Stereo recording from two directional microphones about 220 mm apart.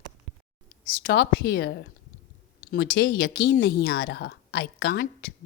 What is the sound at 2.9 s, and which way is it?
A woman's voice, 50° left (ahead or behind).